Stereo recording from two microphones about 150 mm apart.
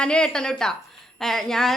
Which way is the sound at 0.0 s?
5° left (ahead or behind).